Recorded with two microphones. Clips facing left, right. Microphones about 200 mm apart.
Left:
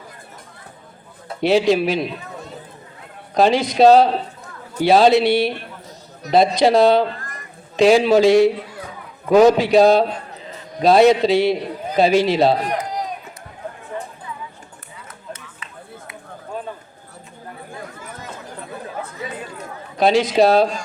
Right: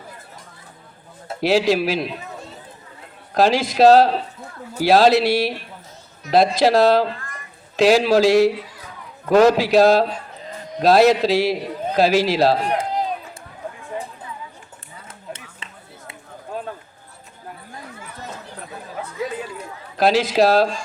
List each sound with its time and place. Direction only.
1.4 s a man's voice: centre (ahead or behind)
3.3 s a man's voice: centre (ahead or behind)
12.6 s run: 30° right (ahead or behind)
15.3 s a sound: 25° right (ahead or behind)
20.0 s a man's voice: centre (ahead or behind)